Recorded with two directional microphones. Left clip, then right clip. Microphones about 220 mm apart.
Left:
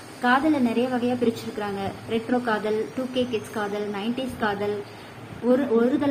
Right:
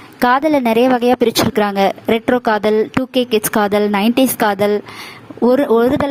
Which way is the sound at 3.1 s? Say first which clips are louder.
Right 12 dB; 55° right (ahead or behind).